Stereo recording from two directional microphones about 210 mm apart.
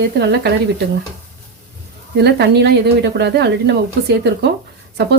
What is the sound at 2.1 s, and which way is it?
Speech, 55° right (ahead or behind).